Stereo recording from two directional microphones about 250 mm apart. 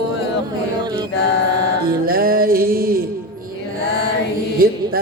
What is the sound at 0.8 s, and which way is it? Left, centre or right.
Mantra, centre.